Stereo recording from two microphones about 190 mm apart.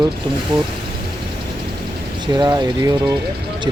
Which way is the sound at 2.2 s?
20° right (ahead or behind).